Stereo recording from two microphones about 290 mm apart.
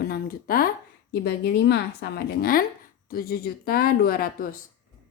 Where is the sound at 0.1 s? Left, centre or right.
Left.